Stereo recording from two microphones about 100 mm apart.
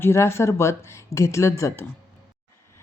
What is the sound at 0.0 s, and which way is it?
Speech, 25° left (ahead or behind).